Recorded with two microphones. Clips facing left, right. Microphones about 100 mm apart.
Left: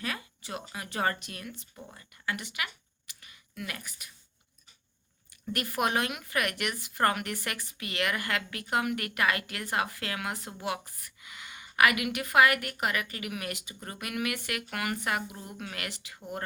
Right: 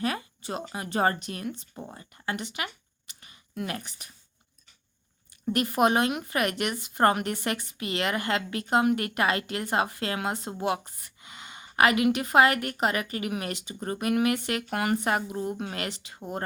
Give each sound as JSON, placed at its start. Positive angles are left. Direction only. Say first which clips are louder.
{"t": 0.0, "sound": "speech", "louder": "right 7 dB", "side_deg": -30}
{"t": 3.1, "sound": "a sound", "louder": "right 5 dB", "side_deg": -30}
{"t": 5.5, "sound": "speech", "louder": "right 7 dB", "side_deg": -25}